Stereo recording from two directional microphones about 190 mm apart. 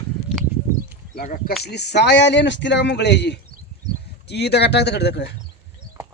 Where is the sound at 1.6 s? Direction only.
60° left (ahead or behind).